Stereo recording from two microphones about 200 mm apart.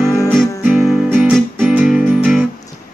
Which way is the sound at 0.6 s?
5° right (ahead or behind).